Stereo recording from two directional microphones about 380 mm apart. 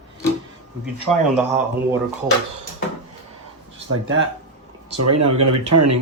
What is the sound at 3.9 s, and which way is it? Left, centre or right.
Speech, right.